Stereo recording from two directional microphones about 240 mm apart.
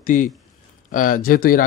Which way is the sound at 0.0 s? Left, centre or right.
Left.